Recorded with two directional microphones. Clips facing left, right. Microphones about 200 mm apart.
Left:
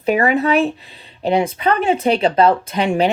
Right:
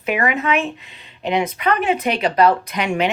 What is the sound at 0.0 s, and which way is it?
Speech, 35° left (ahead or behind).